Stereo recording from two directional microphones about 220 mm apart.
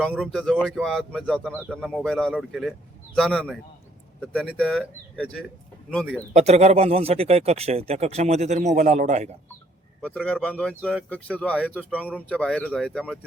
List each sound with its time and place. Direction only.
0.0 s speech: centre (ahead or behind)
6.3 s speech: 30° right (ahead or behind)
10.0 s speech: 5° left (ahead or behind)